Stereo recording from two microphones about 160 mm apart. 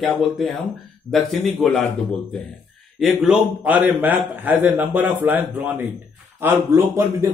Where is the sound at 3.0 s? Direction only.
Centre (ahead or behind).